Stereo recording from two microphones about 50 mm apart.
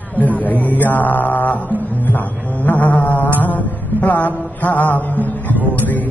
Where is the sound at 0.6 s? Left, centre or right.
Left.